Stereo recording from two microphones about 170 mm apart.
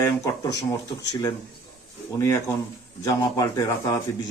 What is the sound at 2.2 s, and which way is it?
A man's voice, 15° left (ahead or behind).